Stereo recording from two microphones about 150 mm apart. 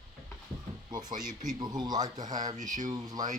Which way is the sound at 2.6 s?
55° right (ahead or behind).